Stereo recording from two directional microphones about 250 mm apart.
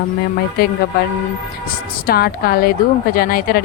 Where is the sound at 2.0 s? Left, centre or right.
Left.